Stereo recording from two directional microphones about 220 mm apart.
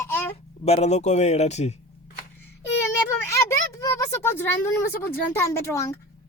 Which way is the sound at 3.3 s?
15° left (ahead or behind).